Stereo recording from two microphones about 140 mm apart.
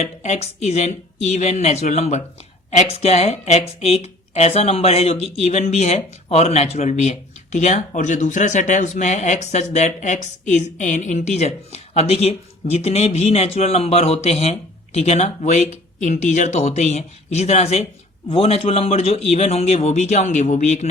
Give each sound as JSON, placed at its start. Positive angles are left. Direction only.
{"t": 0.0, "sound": "speech", "side_deg": 55}